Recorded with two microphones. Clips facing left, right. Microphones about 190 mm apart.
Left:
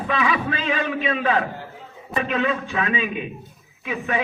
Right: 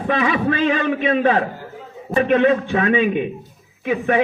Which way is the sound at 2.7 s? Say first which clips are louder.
Right 8 dB; 55° right (ahead or behind).